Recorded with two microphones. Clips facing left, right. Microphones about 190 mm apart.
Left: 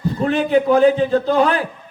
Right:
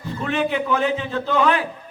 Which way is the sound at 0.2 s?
35° left (ahead or behind).